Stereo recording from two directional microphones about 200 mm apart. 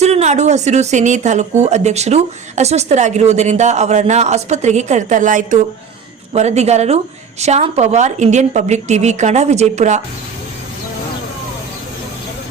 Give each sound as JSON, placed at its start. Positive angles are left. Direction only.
{"t": 0.0, "sound": "a woman's voice", "side_deg": -35}